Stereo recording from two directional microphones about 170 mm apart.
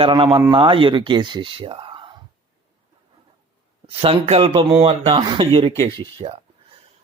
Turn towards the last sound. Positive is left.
turn(degrees=-30)  # may be behind; listen again after turning